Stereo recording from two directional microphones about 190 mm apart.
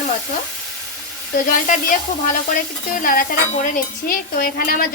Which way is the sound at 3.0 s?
45° left (ahead or behind).